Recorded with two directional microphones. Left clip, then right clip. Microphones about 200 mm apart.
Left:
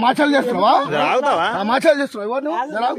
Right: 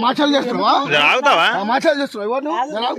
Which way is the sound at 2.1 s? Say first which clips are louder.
Right 1 dB; 5° right (ahead or behind).